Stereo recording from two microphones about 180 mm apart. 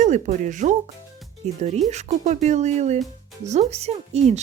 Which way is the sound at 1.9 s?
40° right (ahead or behind).